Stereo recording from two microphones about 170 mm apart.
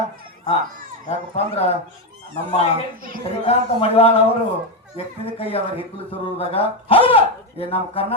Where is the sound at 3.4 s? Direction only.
35° left (ahead or behind).